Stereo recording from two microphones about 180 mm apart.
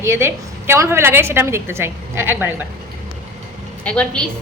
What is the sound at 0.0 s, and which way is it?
A woman's voice, 15° right (ahead or behind).